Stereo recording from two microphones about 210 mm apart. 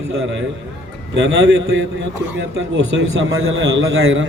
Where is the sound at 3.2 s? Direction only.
75° right (ahead or behind).